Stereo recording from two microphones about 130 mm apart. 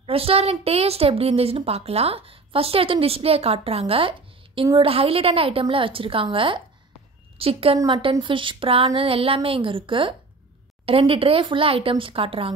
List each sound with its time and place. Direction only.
0.0 s a woman's voice: 45° right (ahead or behind)
7.8 s a woman's voice: 30° right (ahead or behind); by 12.5 s 45° right (ahead or behind)